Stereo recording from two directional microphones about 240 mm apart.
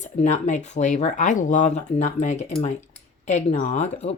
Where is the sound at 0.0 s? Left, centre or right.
Left.